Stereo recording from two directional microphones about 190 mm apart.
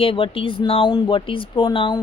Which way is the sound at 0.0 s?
30° left (ahead or behind).